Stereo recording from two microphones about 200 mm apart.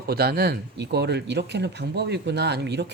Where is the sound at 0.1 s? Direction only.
50° right (ahead or behind).